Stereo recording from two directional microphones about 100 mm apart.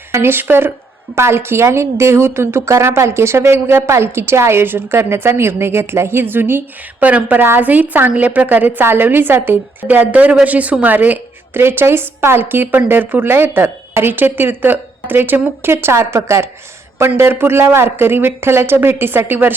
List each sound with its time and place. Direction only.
0.1 s a woman's voice: 25° right (ahead or behind)